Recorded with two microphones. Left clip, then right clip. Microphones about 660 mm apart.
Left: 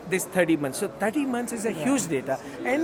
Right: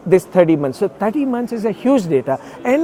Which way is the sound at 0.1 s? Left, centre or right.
Right.